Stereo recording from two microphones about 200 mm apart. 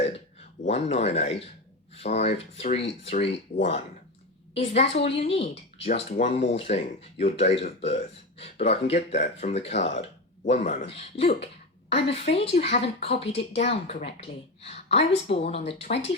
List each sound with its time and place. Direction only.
0.6 s speech: 30° left (ahead or behind)